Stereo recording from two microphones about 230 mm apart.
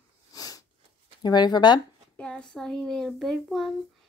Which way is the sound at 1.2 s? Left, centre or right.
Centre.